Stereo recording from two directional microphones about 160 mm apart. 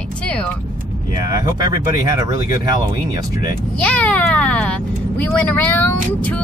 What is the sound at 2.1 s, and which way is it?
Speech, 20° right (ahead or behind).